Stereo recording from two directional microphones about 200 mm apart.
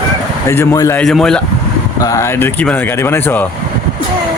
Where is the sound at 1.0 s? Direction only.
Centre (ahead or behind).